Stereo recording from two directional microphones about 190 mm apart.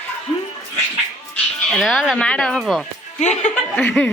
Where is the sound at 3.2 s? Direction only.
40° left (ahead or behind).